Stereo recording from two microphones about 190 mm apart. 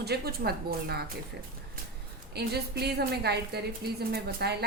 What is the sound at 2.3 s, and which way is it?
A woman's voice, 60° right (ahead or behind).